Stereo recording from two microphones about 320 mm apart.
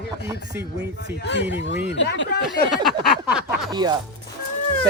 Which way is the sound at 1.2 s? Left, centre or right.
Left.